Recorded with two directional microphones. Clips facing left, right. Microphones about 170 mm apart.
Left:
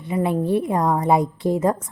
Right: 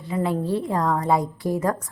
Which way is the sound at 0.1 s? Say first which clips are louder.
Left 3 dB; 20° left (ahead or behind).